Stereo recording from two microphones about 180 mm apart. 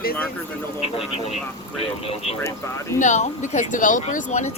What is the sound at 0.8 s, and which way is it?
Speech, 35° left (ahead or behind).